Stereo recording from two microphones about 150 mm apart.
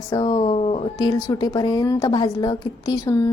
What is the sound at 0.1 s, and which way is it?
A woman's voice, 30° left (ahead or behind).